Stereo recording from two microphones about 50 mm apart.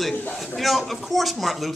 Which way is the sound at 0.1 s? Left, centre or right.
Left.